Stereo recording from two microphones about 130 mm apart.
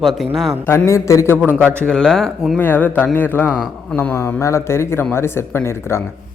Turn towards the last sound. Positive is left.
turn(degrees=20)  # may be behind; listen again after turning